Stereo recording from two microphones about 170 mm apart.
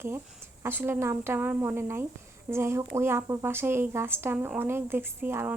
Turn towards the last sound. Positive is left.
turn(degrees=-15)  # may be behind; listen again after turning